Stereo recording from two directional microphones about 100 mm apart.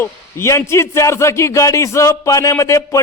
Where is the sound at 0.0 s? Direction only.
25° left (ahead or behind).